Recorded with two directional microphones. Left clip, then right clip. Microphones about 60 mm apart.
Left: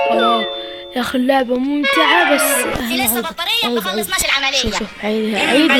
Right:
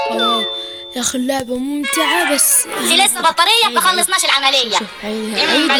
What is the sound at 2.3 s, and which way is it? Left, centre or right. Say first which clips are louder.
Music: left 4 dB; centre.